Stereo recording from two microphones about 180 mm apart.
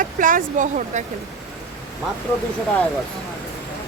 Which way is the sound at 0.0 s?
50° right (ahead or behind).